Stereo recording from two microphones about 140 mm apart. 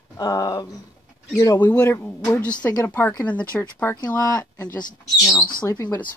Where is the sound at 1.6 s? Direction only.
10° left (ahead or behind).